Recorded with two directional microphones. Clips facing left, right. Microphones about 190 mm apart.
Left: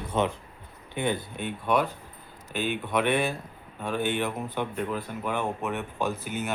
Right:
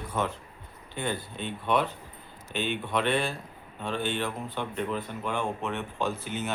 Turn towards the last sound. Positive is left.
turn(degrees=10)  # may be behind; listen again after turning